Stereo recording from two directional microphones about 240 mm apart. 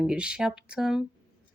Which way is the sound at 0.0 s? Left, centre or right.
Centre.